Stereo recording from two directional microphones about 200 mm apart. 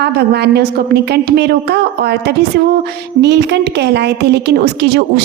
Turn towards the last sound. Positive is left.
turn(degrees=-55)  # may be behind; listen again after turning